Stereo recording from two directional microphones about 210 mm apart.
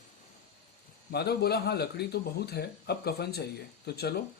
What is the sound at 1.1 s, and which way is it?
Speech, 50° left (ahead or behind).